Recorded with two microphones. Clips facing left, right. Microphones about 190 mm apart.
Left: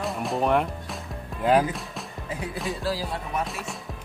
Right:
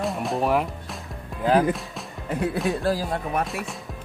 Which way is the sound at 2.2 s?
60° right (ahead or behind).